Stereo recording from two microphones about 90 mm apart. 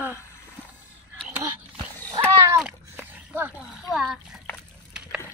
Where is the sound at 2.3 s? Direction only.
30° right (ahead or behind).